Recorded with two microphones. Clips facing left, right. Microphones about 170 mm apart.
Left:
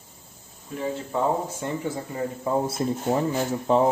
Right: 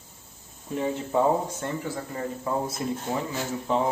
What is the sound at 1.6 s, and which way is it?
Speech, 15° left (ahead or behind).